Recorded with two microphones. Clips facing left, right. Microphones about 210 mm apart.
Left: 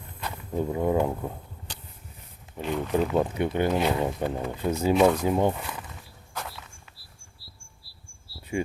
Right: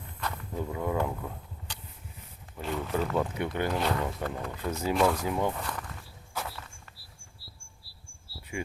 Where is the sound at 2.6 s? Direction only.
Centre (ahead or behind).